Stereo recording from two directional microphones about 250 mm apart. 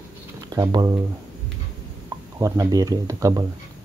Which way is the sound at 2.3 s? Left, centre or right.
Centre.